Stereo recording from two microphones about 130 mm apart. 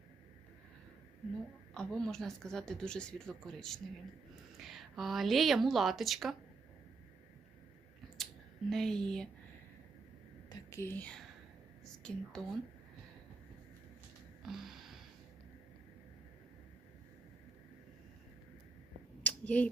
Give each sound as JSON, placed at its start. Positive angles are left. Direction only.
{"t": 1.7, "sound": "a woman's voice", "side_deg": 5}
{"t": 8.7, "sound": "a woman's voice", "side_deg": 5}
{"t": 10.5, "sound": "a woman's voice", "side_deg": 25}
{"t": 14.4, "sound": "a sound", "side_deg": 0}
{"t": 19.2, "sound": "finger snapping", "side_deg": 10}